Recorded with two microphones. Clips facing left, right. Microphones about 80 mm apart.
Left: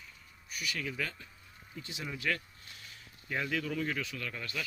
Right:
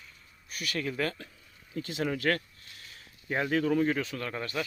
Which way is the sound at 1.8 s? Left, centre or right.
Right.